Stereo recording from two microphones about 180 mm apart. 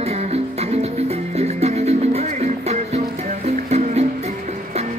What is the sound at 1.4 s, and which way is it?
Music, 35° right (ahead or behind).